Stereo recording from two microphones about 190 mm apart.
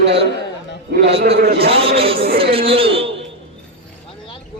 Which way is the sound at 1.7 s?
30° right (ahead or behind).